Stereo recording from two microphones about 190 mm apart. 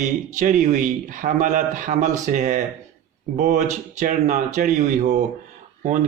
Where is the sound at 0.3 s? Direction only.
40° right (ahead or behind).